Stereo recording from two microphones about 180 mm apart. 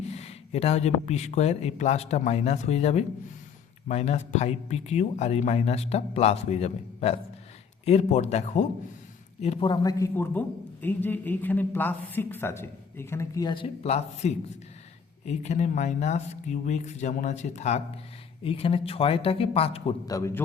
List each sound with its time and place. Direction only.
0.0 s a man's voice: 35° left (ahead or behind)
20.1 s a man's voice: 20° left (ahead or behind)